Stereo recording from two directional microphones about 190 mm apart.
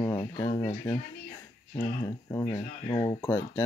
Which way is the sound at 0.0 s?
20° left (ahead or behind).